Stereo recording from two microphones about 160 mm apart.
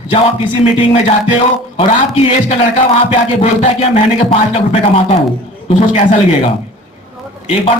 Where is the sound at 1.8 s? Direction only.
35° left (ahead or behind).